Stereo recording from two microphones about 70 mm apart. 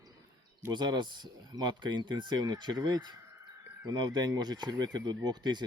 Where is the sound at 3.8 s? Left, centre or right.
Right.